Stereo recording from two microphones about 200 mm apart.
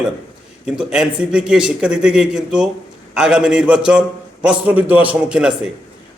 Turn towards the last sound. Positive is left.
turn(degrees=-5)  # may be behind; listen again after turning